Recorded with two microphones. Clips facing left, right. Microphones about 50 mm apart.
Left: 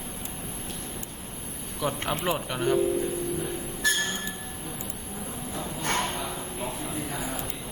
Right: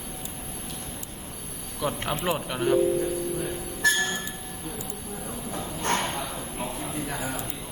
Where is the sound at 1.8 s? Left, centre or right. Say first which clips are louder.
Even; centre.